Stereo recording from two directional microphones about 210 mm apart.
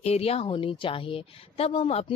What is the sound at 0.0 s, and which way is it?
A woman's voice, 30° left (ahead or behind).